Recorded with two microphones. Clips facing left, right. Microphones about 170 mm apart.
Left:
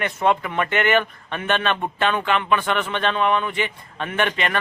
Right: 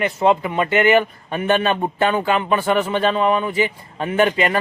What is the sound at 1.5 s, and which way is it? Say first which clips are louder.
Speech: right 4 dB; 35° right (ahead or behind).